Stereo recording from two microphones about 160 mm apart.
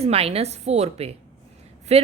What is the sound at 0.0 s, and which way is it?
A woman's voice, 40° right (ahead or behind).